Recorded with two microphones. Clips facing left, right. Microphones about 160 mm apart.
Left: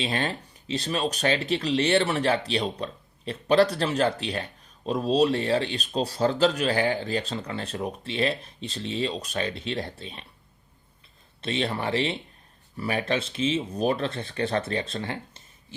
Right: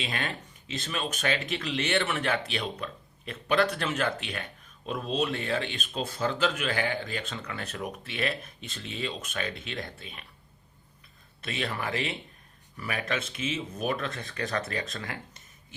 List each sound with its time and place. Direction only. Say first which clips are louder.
0.0 s speech: left 6 dB; 30° left (ahead or behind)
11.3 s speech: left 5 dB; 30° left (ahead or behind)